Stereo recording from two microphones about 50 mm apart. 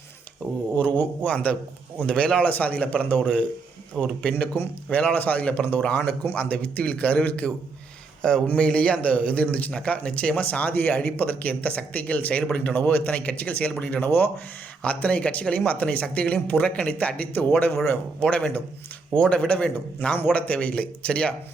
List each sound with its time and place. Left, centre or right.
0.4 s a sound: left
0.8 s a sound: left
1.2 s speech: left
4.9 s speech: left
8.4 s speech: centre
12.7 s speech: left
18.2 s speech: left
20.3 s speech: left